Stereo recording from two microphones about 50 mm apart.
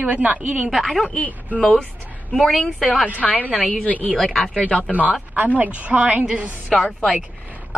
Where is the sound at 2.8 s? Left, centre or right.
Centre.